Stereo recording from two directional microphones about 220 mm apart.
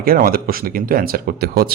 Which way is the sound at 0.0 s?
40° right (ahead or behind).